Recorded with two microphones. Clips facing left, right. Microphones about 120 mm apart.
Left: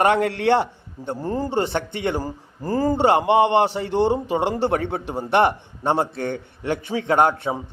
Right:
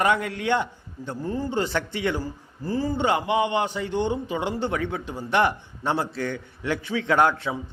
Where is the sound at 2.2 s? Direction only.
45° left (ahead or behind).